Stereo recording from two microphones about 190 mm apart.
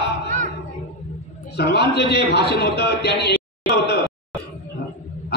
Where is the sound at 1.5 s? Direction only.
60° left (ahead or behind).